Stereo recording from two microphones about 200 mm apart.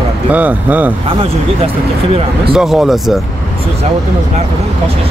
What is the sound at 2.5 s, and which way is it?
Speech, 5° right (ahead or behind).